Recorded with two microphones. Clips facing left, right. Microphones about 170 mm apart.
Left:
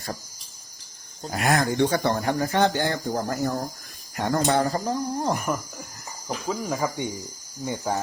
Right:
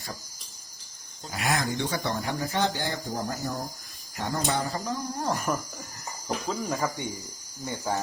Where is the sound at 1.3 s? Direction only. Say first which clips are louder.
Left 5 dB; 45° left (ahead or behind); by 4.7 s 60° left (ahead or behind).